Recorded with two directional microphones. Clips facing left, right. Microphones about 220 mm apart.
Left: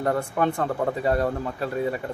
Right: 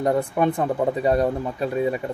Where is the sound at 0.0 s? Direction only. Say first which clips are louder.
Right 3 dB; 15° right (ahead or behind).